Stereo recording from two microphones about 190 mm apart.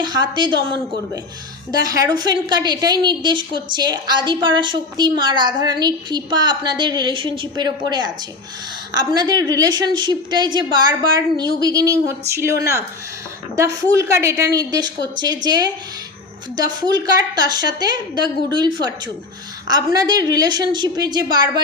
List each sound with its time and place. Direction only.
0.0 s a woman's voice: 20° right (ahead or behind)
1.7 s a woman's voice: 20° right (ahead or behind)
13.6 s a woman's voice: 15° right (ahead or behind)